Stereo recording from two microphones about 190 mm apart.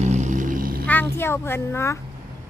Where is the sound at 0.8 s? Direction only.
10° left (ahead or behind).